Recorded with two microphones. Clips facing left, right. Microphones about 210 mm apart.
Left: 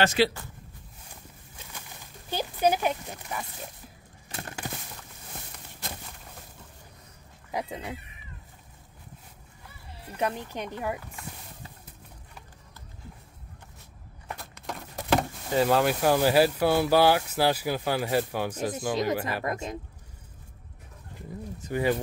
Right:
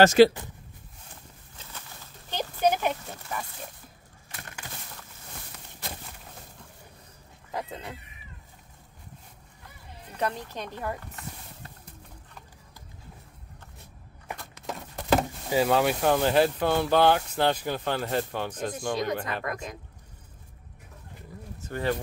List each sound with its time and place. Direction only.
0.0 s speech: 45° right (ahead or behind)
2.3 s a sound: 10° left (ahead or behind)
4.3 s a sound: 30° left (ahead or behind)
7.5 s speech: 15° left (ahead or behind)
10.1 s speech: 10° left (ahead or behind)
14.4 s speech: centre (ahead or behind)
19.4 s speech: 25° left (ahead or behind)
21.5 s speech: 15° left (ahead or behind)